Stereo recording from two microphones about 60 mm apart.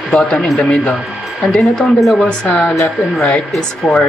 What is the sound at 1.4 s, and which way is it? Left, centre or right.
Speech, centre.